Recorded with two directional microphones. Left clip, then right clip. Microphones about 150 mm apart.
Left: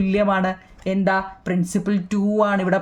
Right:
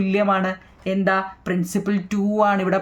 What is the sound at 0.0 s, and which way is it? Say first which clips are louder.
Speech: even; 30° left (ahead or behind).